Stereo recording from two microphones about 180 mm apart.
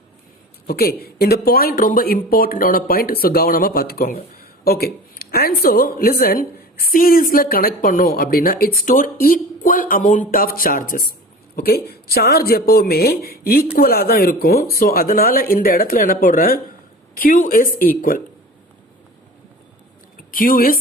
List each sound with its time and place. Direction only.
0.7 s speech: 60° left (ahead or behind)
20.3 s speech: 50° left (ahead or behind)